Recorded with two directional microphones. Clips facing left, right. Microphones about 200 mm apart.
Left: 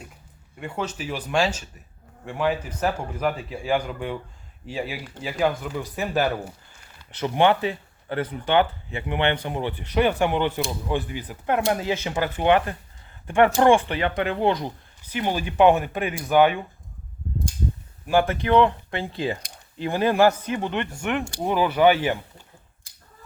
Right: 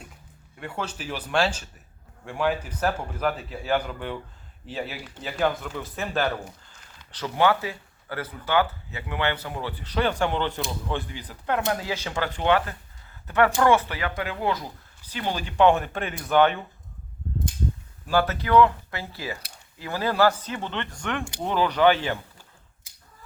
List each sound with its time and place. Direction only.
0.9 s speech: 5° left (ahead or behind)
5.8 s speech: 15° left (ahead or behind)
7.2 s speech: 20° left (ahead or behind)
15.1 s speech: 15° left (ahead or behind)
18.1 s speech: 20° left (ahead or behind)